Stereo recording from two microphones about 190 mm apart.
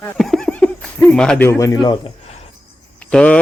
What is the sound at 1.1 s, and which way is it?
A man's voice, 5° left (ahead or behind).